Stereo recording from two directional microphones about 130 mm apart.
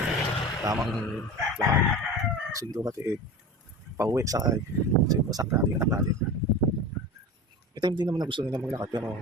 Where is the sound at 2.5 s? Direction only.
25° right (ahead or behind).